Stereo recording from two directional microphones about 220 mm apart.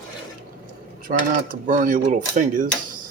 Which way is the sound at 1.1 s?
35° right (ahead or behind).